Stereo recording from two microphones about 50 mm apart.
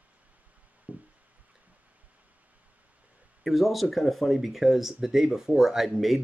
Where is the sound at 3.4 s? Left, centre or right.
Centre.